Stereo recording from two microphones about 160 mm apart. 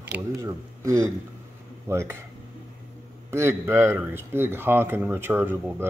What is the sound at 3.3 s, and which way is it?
Speech, 15° right (ahead or behind).